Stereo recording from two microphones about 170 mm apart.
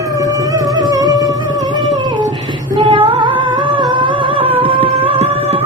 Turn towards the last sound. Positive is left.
turn(degrees=-35)  # may be behind; listen again after turning